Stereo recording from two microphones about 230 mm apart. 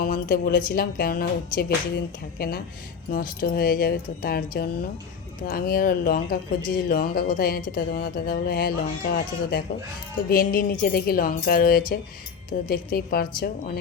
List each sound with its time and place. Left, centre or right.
0.0 s speech: left